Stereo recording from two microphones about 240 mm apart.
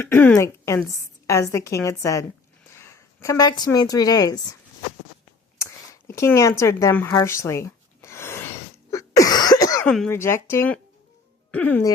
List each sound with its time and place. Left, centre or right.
0.0 s a woman's voice: centre
5.5 s a sound: centre
6.6 s speech: centre
8.9 s cough: centre
9.9 s a woman's voice: centre